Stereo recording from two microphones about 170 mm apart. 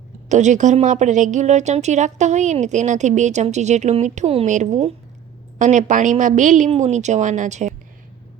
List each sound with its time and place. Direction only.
0.3 s a woman's voice: 45° right (ahead or behind)